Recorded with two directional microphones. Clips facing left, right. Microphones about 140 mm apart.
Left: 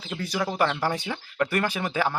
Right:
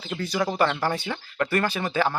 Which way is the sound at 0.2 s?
5° left (ahead or behind).